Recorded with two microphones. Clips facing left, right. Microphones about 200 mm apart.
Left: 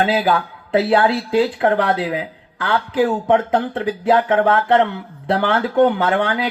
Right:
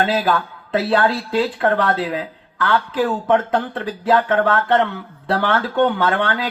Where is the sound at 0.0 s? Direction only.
20° left (ahead or behind).